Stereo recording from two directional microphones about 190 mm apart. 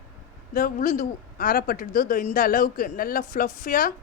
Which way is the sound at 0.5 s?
45° left (ahead or behind).